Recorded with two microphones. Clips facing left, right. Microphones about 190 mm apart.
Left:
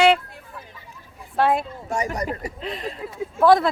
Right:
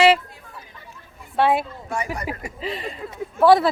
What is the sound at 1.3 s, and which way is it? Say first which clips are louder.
Speech: right 1 dB; centre (ahead or behind).